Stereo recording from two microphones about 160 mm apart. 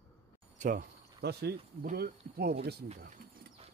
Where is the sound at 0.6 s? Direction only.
60° right (ahead or behind); by 2.7 s 85° right.